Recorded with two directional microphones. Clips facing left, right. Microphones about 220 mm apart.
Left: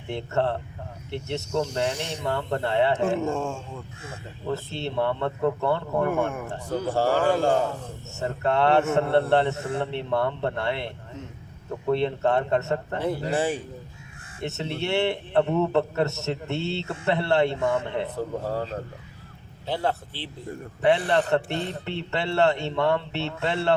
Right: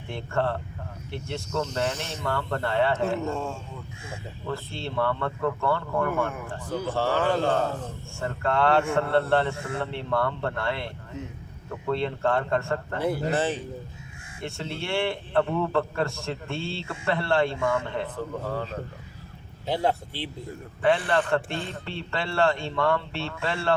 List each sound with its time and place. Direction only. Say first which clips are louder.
0.1 s a man's voice: left 2 dB; 20° left (ahead or behind)
1.5 s speech: left 2 dB; 10° left (ahead or behind)
3.0 s a man's voice: left 3 dB; 50° left (ahead or behind)
4.4 s a man's voice: left 4 dB; 20° left (ahead or behind)
6.8 s a man's voice: left 3 dB; 40° left (ahead or behind)
7.2 s a man's voice: left 1 dB; 15° left (ahead or behind)
18.2 s speech: left 3 dB; 40° left (ahead or behind)
19.6 s speech: right 1 dB; 15° right (ahead or behind)
21.1 s a man's voice: left 2 dB; 20° left (ahead or behind)